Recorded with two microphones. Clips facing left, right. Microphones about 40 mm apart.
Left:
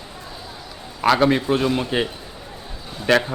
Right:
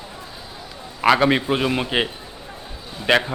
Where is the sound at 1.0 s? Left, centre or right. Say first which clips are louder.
Even; right.